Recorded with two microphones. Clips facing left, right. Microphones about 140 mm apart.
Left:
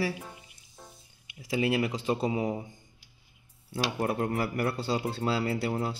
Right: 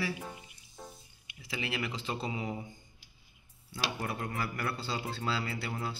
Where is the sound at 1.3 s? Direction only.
40° left (ahead or behind).